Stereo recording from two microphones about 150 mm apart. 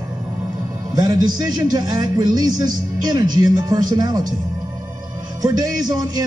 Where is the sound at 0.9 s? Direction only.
25° right (ahead or behind).